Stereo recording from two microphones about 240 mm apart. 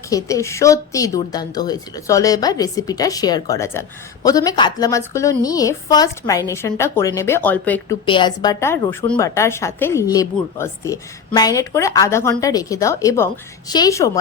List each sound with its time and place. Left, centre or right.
0.1 s speech: centre
8.0 s speech: centre